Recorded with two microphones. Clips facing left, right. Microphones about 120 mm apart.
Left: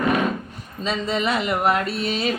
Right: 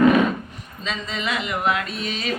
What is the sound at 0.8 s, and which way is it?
Speech, 35° left (ahead or behind).